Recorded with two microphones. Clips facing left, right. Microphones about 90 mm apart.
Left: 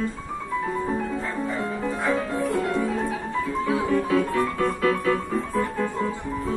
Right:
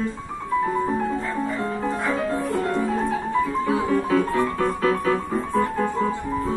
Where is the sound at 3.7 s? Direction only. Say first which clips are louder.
Right 1 dB; 30° right (ahead or behind).